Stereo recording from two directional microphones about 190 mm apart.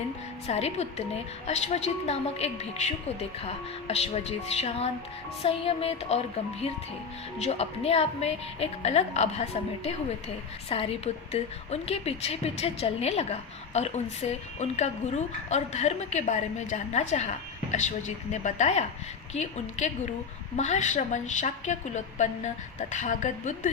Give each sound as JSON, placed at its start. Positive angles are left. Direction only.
{"t": 0.4, "sound": "a woman's voice", "side_deg": 35}